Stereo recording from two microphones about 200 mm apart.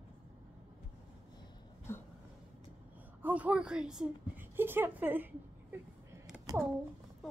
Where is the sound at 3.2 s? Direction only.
5° right (ahead or behind).